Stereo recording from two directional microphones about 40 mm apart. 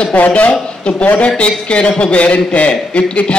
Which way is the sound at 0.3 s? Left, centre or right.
Left.